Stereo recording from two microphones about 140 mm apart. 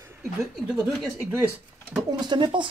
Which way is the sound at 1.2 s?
15° right (ahead or behind).